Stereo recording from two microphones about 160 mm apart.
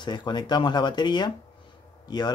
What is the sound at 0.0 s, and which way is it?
Speech, 30° left (ahead or behind).